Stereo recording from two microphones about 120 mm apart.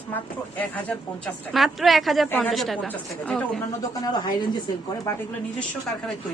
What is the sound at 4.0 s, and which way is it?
Speech, 35° left (ahead or behind).